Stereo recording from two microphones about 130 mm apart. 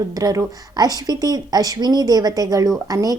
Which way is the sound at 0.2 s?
30° right (ahead or behind).